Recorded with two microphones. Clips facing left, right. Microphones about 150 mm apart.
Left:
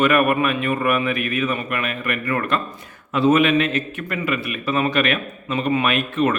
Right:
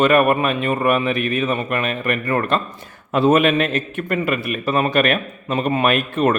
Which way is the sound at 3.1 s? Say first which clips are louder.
Right 1 dB; 55° right (ahead or behind).